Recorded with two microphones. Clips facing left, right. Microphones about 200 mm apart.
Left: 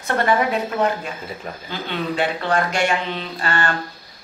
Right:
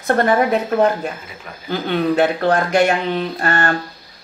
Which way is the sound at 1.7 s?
50° right (ahead or behind).